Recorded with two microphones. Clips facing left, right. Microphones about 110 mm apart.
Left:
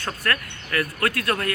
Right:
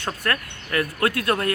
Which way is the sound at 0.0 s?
25° right (ahead or behind).